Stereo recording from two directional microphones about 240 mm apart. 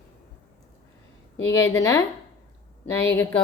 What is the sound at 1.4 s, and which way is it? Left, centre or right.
Speech, left.